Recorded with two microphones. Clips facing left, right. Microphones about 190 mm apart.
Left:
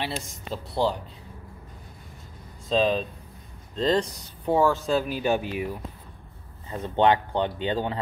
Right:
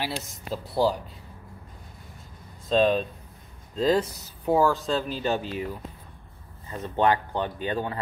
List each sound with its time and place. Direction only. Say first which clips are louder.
0.0 s speech: even; 5° right (ahead or behind)
2.7 s speech: right 1 dB; centre (ahead or behind)
6.7 s speech: left 2 dB; 20° left (ahead or behind)